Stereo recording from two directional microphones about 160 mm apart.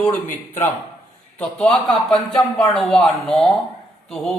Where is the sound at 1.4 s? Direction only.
5° left (ahead or behind).